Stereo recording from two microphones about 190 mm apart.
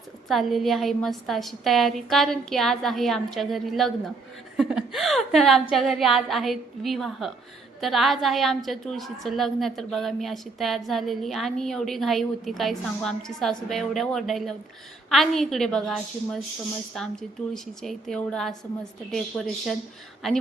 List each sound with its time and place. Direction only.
0.3 s a woman's voice: centre (ahead or behind)